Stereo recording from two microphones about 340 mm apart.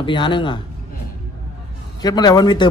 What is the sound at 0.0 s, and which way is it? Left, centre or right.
Speech, centre.